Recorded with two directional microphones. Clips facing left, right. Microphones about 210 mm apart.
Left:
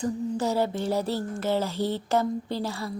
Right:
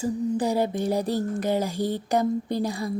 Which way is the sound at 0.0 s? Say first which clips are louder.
Right 2 dB; 15° right (ahead or behind).